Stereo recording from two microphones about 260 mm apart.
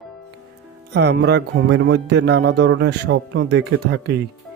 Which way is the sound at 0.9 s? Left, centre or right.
Right.